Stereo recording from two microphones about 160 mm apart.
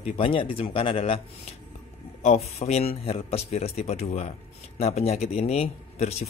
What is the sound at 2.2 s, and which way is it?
Speech, 45° left (ahead or behind).